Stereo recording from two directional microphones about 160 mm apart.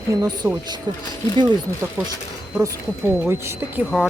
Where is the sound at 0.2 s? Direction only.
15° right (ahead or behind).